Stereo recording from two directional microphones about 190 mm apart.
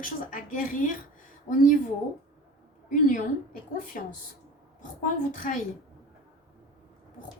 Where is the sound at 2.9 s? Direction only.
45° left (ahead or behind).